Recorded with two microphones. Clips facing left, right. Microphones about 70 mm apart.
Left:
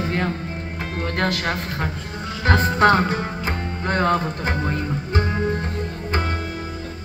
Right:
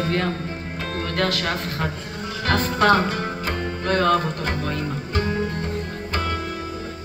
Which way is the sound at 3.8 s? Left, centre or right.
Left.